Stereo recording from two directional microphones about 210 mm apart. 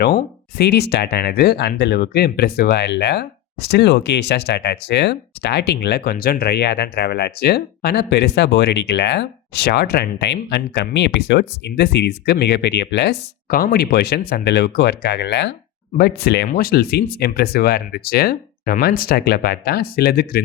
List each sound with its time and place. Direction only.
0.5 s speech: 50° left (ahead or behind)